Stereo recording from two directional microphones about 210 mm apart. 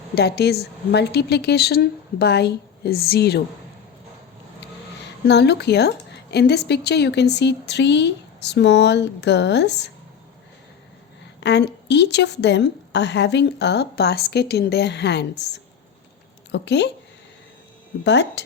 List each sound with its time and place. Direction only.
0.2 s a woman's voice: 50° left (ahead or behind)
5.3 s a woman's voice: 55° left (ahead or behind)
11.3 s a woman's voice: 55° left (ahead or behind)
18.0 s a woman's voice: 55° left (ahead or behind)